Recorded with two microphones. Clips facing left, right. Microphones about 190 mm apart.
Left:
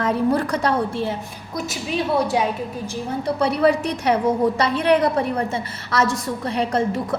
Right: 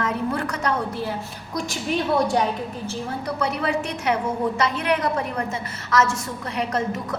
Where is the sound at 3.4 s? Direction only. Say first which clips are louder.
Left 7 dB; 35° left (ahead or behind).